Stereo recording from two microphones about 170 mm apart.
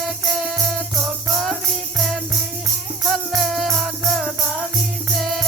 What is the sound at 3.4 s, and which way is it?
Music, centre (ahead or behind).